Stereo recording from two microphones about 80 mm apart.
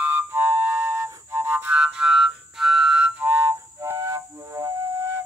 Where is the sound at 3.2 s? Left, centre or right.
Right.